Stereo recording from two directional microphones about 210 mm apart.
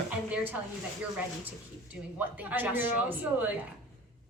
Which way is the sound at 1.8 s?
5° right (ahead or behind).